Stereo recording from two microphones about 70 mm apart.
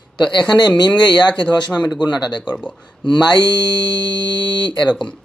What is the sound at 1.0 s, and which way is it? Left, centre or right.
Speech, left.